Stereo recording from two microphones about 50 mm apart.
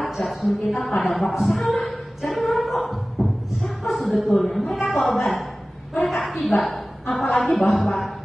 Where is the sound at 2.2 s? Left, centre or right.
Centre.